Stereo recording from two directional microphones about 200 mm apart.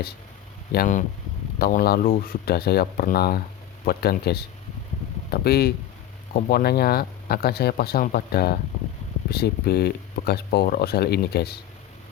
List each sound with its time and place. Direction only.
0.7 s speech: 45° left (ahead or behind)